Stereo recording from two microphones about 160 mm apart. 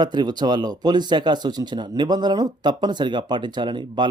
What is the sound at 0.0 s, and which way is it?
Speech, 25° right (ahead or behind).